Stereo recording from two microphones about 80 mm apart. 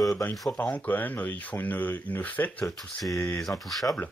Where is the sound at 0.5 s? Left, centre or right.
Centre.